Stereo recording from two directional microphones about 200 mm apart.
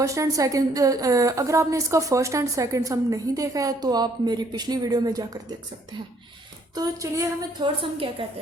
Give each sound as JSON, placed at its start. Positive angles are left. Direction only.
{"t": 0.0, "sound": "a woman's voice", "side_deg": -15}
{"t": 6.7, "sound": "a woman's voice", "side_deg": -15}